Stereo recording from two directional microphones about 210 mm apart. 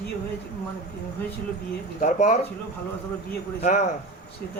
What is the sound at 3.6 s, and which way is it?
Speech, 35° left (ahead or behind).